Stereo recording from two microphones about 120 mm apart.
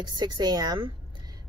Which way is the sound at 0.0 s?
35° right (ahead or behind).